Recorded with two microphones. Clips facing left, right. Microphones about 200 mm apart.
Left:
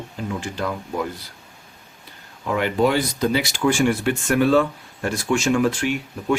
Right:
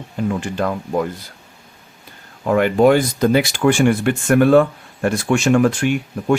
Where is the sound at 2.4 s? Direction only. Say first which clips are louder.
Right 7 dB; 50° right (ahead or behind).